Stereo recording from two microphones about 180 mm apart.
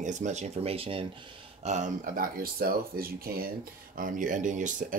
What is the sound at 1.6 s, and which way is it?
Speech, 40° right (ahead or behind).